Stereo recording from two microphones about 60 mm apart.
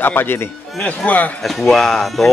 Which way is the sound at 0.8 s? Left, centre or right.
Left.